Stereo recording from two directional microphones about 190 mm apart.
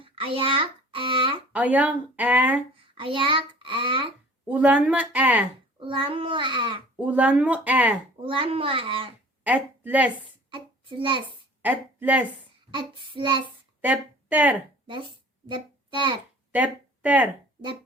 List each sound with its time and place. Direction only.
0.0 s a child's voice: 30° right (ahead or behind)
1.5 s speech: 5° right (ahead or behind)
2.7 s a child's voice: 30° right (ahead or behind)
4.4 s speech: 5° right (ahead or behind)
5.8 s a child's voice: 25° right (ahead or behind)
6.9 s speech: 10° right (ahead or behind)
8.2 s a child's voice: 30° right (ahead or behind)
9.4 s a woman's voice: 5° right (ahead or behind)
10.5 s a child's voice: 25° right (ahead or behind)
11.6 s a woman's voice: 10° right (ahead or behind)
12.7 s a child's voice: 25° right (ahead or behind)
13.8 s speech: 10° right (ahead or behind)
14.8 s a sound: 25° right (ahead or behind)
16.5 s speech: 10° right (ahead or behind)